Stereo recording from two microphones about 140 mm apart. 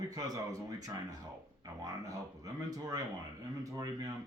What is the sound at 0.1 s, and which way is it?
Speech, 25° right (ahead or behind).